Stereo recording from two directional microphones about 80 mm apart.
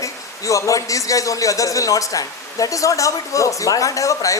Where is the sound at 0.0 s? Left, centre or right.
Left.